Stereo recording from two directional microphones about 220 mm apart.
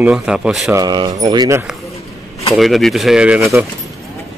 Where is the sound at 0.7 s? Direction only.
20° right (ahead or behind).